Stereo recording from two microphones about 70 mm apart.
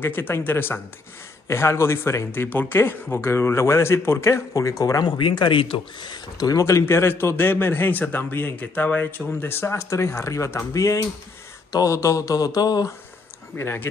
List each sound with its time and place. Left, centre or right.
0.0 s a man's voice: left
6.0 s speech: left
6.6 s a man's voice: left
13.6 s a man's voice: left